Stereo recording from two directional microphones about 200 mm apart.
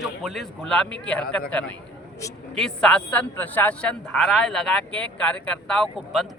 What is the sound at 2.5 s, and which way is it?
A man's voice, 5° left (ahead or behind).